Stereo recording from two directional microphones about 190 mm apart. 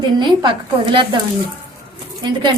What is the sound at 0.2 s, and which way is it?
A woman's voice, 25° right (ahead or behind).